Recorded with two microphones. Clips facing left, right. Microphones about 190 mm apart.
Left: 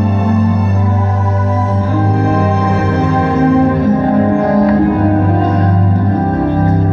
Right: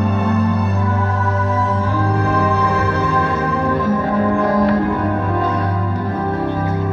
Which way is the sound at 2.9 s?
30° left (ahead or behind).